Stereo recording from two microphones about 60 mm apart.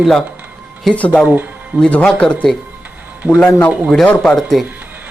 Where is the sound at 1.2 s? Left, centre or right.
Right.